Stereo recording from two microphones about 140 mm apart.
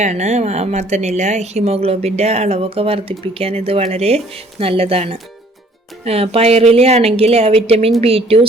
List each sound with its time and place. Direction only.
0.0 s a woman's voice: 55° right (ahead or behind)